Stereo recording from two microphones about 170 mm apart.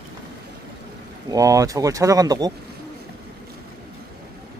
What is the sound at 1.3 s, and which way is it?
Speech, 20° right (ahead or behind).